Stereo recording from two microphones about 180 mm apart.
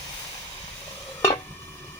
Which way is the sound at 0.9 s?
15° left (ahead or behind).